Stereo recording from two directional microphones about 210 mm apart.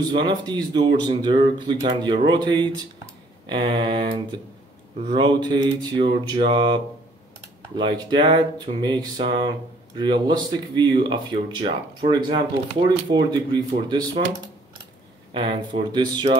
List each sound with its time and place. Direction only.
0.1 s speech: 20° right (ahead or behind)
15.3 s speech: 25° right (ahead or behind)